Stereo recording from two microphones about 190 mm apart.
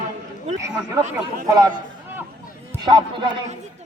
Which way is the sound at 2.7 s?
25° right (ahead or behind).